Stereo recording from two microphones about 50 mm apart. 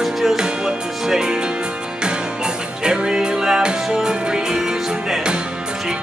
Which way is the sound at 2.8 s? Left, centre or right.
Centre.